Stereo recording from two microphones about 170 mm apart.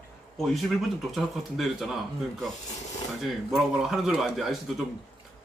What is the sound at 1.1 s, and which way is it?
Speech, centre (ahead or behind).